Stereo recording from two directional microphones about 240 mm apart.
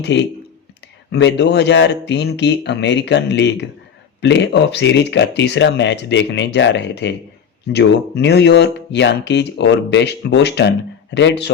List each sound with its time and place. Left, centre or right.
0.0 s speech: left